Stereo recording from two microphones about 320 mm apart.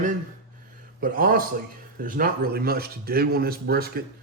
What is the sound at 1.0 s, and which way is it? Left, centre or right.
Speech, right.